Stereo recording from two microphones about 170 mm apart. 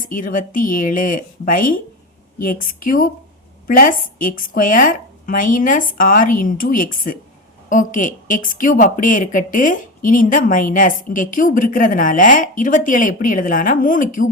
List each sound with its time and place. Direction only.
0.1 s a woman's voice: 55° left (ahead or behind)